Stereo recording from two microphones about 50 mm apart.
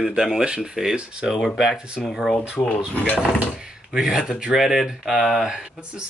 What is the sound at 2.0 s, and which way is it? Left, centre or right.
Speech, centre.